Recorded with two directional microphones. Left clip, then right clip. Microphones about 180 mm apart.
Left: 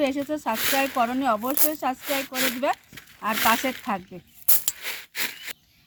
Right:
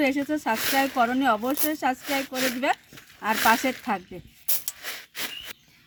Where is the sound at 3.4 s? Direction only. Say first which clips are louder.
Right 1 dB; 30° left (ahead or behind).